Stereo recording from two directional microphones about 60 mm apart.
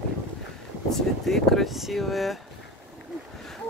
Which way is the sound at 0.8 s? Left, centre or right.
Centre.